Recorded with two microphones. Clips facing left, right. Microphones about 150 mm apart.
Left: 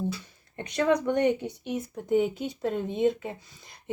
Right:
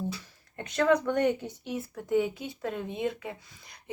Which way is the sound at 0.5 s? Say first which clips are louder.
Even; 15° left (ahead or behind).